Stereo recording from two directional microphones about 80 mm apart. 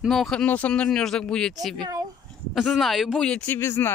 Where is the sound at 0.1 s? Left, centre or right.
Centre.